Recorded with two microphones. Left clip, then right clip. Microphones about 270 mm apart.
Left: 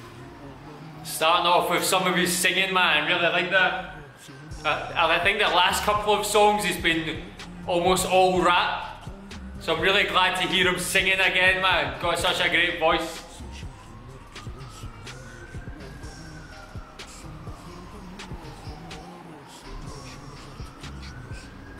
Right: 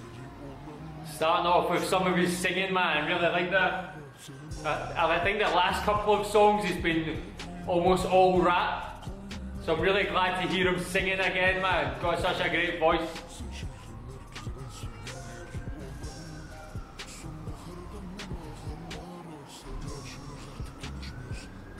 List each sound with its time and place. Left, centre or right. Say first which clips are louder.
1.2 s a man's voice: left 4 dB; centre